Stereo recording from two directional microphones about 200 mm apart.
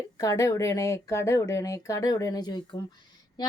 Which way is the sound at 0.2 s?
15° left (ahead or behind).